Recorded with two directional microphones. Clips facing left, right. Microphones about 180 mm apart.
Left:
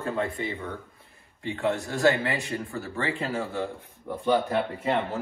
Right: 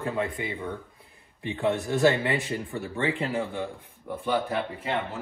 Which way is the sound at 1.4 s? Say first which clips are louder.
Right 1 dB; 20° right (ahead or behind).